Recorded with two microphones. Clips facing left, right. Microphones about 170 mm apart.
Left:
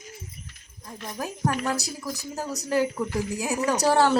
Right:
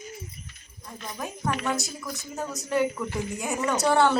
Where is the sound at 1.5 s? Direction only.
35° left (ahead or behind).